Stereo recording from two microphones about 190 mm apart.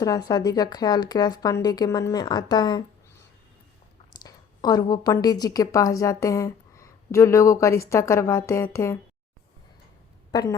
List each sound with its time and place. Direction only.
0.0 s speech: 20° left (ahead or behind)
4.1 s a woman's voice: 20° left (ahead or behind)
10.3 s speech: 20° left (ahead or behind)